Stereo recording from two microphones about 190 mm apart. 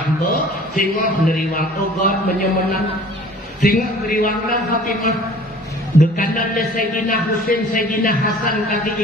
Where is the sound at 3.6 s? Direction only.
45° left (ahead or behind).